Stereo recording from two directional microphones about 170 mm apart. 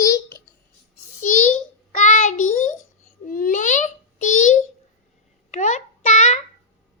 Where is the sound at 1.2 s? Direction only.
45° left (ahead or behind).